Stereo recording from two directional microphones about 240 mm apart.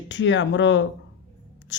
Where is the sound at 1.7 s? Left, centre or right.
Left.